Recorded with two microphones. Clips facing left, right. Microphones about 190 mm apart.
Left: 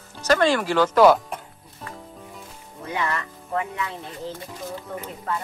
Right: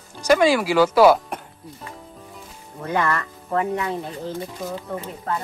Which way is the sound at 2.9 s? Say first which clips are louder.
Right 5 dB; 50° right (ahead or behind).